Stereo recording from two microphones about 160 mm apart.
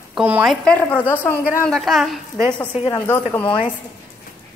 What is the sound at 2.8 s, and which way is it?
Speech, 20° left (ahead or behind).